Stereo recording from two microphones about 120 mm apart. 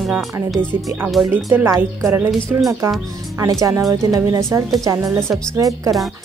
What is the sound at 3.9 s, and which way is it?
Speech, 30° right (ahead or behind).